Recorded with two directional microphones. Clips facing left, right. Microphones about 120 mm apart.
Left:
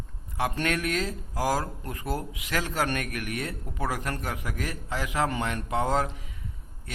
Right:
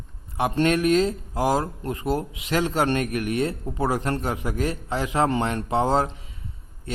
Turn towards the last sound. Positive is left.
turn(degrees=-25)  # may be behind; listen again after turning